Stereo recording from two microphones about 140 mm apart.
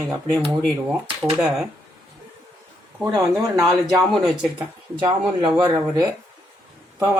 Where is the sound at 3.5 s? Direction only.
25° right (ahead or behind).